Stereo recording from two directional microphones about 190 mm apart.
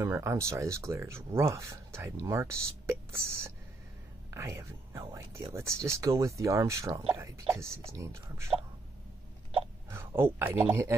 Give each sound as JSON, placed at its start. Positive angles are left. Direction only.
{"t": 0.0, "sound": "speech", "side_deg": -15}
{"t": 9.8, "sound": "speech", "side_deg": -15}